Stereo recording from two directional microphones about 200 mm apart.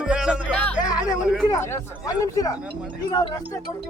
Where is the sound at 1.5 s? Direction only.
15° left (ahead or behind).